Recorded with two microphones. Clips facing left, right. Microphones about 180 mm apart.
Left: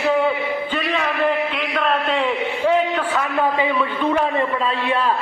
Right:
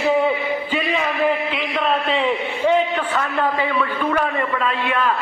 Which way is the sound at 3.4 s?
15° left (ahead or behind).